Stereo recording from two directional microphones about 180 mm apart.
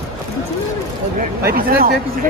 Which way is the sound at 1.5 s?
55° right (ahead or behind).